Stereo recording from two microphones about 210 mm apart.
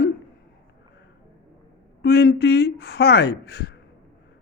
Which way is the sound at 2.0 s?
50° left (ahead or behind).